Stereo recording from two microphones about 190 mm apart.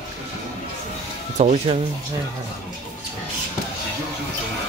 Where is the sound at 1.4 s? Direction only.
35° right (ahead or behind).